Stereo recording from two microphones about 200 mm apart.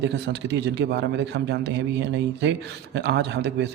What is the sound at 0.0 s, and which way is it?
A man's voice, 60° right (ahead or behind).